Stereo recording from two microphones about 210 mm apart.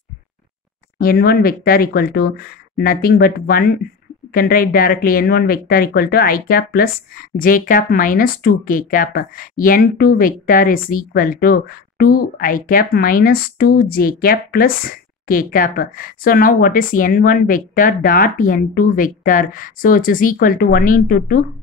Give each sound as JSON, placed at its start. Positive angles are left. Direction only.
{"t": 0.9, "sound": "speech", "side_deg": 45}